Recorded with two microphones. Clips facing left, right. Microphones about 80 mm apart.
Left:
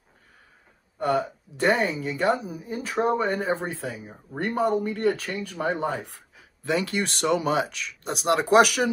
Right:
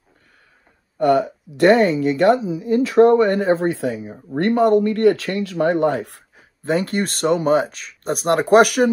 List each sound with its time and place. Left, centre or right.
0.9 s speech: right
6.3 s speech: right